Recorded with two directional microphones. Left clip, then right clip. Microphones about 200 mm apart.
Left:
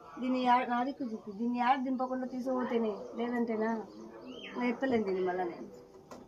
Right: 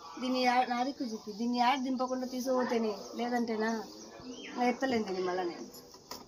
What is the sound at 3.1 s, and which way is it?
Speech, 5° left (ahead or behind).